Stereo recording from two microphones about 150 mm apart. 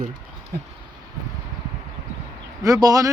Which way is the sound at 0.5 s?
80° right.